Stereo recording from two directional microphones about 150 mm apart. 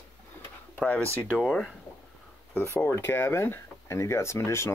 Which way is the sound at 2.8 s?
15° left (ahead or behind).